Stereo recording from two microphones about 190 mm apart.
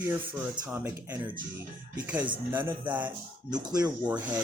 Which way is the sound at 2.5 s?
10° right (ahead or behind).